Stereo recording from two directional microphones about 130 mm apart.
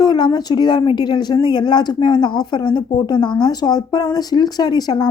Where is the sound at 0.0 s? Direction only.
30° left (ahead or behind).